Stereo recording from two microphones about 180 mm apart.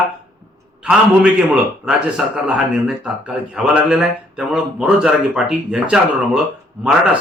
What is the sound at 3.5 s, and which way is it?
A man's voice, 5° right (ahead or behind).